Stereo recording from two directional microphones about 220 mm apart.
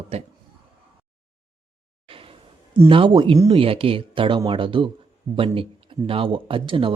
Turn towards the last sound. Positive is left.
turn(degrees=-25)  # may be behind; listen again after turning